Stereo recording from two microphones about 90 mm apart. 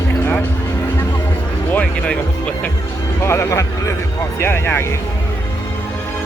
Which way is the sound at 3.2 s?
30° left (ahead or behind).